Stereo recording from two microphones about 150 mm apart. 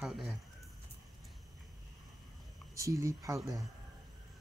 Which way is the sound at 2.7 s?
20° right (ahead or behind).